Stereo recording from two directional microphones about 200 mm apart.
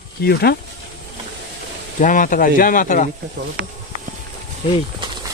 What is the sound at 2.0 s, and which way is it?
Speech, 40° left (ahead or behind).